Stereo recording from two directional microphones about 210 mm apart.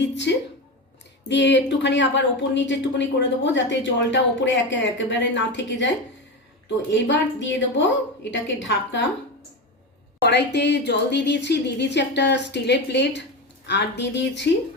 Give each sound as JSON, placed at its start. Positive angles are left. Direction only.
{"t": 0.0, "sound": "a sound", "side_deg": 55}
{"t": 1.3, "sound": "speech", "side_deg": 55}
{"t": 6.9, "sound": "speech", "side_deg": 60}
{"t": 10.2, "sound": "speech", "side_deg": 55}